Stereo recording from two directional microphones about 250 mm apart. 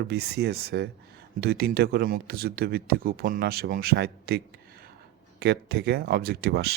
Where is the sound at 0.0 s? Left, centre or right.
Right.